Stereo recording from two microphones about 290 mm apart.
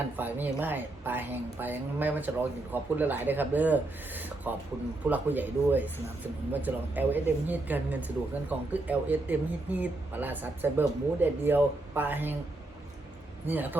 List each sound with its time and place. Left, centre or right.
0.2 s a man's voice: centre
13.5 s a man's voice: centre